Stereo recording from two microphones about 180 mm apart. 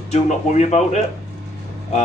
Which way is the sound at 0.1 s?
40° left (ahead or behind).